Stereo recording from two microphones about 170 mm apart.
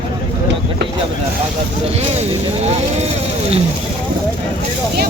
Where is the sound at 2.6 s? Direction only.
40° right (ahead or behind).